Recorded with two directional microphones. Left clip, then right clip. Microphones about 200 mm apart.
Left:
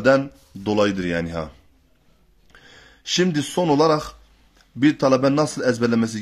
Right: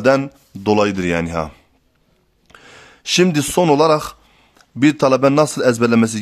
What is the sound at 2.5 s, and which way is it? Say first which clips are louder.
A man's voice: right 6 dB; 30° right (ahead or behind).